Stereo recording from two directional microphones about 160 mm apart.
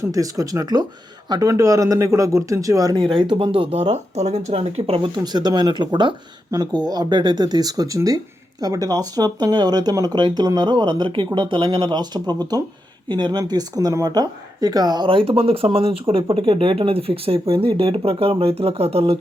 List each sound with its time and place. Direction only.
0.0 s speech: 20° right (ahead or behind); by 19.2 s 40° right (ahead or behind)